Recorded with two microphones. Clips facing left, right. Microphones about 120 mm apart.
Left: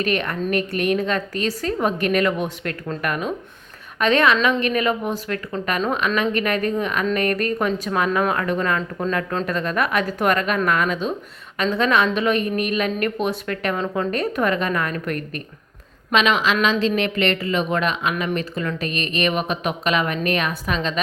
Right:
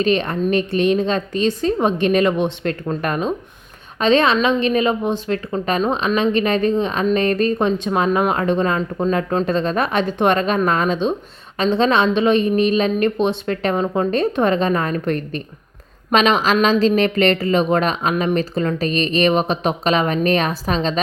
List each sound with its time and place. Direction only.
0.0 s a woman's voice: 25° right (ahead or behind)
16.1 s a woman's voice: 40° right (ahead or behind)
18.1 s a woman's voice: 25° right (ahead or behind)